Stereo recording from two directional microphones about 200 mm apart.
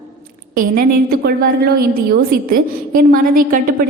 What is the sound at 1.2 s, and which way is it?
A woman's voice, 50° right (ahead or behind).